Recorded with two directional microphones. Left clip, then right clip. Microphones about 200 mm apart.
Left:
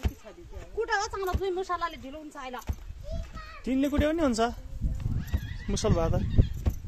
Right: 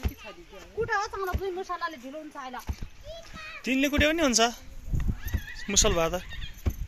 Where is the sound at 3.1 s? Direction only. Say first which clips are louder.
Right 2 dB; 60° left (ahead or behind).